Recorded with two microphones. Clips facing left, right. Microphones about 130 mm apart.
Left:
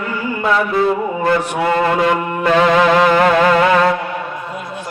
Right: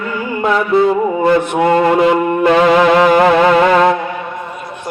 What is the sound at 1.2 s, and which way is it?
Mantra, 20° right (ahead or behind).